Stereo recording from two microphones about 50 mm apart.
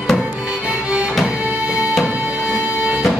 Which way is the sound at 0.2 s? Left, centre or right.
Right.